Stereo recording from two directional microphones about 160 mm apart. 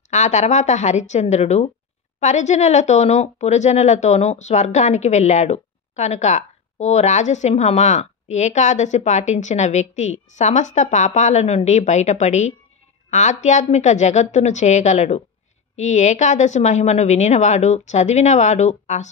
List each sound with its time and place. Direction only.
0.1 s speech: 45° left (ahead or behind)